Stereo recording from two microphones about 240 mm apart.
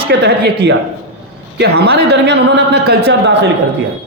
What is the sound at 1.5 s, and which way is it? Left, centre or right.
A man's voice, right.